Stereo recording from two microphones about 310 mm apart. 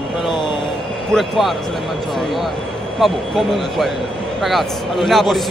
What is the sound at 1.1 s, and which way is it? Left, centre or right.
Speech, centre.